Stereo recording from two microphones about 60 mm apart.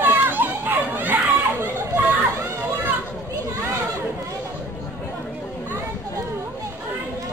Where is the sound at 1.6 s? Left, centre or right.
Right.